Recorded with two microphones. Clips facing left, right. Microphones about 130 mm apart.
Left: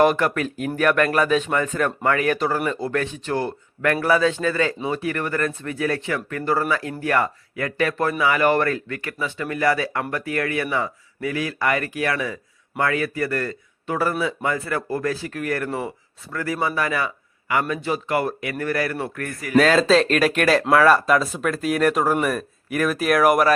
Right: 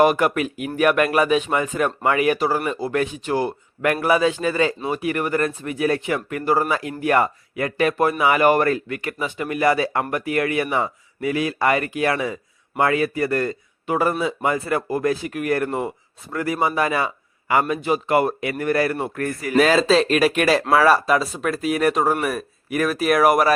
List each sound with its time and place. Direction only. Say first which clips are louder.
0.0 s speech: right 1 dB; 10° right (ahead or behind); by 19.5 s 25° right (ahead or behind)
19.5 s speech: even; 5° right (ahead or behind)